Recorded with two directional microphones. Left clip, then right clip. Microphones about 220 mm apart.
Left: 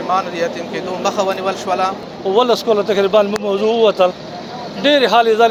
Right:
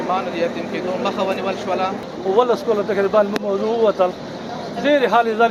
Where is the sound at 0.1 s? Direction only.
55° left (ahead or behind).